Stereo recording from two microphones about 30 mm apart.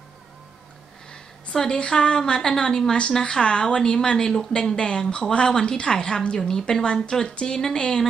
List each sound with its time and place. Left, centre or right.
1.1 s a sound: left
1.9 s speech: left
4.6 s speech: left